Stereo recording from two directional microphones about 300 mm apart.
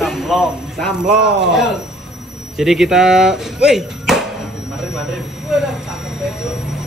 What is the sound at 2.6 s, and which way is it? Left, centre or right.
Speech, centre.